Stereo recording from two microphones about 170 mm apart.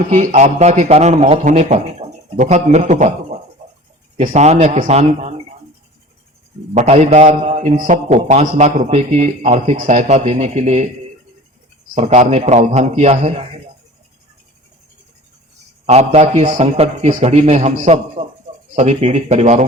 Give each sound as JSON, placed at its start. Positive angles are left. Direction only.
{"t": 0.1, "sound": "a man's voice", "side_deg": -45}
{"t": 6.7, "sound": "a man's voice", "side_deg": -40}
{"t": 11.9, "sound": "a man's voice", "side_deg": -40}
{"t": 15.9, "sound": "a man's voice", "side_deg": -40}